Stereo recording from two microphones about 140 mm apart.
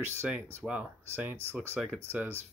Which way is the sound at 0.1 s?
20° right (ahead or behind).